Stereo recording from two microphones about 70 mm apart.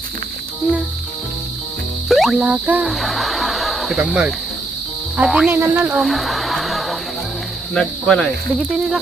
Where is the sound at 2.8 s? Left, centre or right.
Centre.